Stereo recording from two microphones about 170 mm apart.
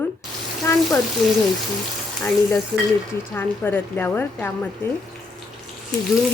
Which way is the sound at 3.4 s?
10° left (ahead or behind).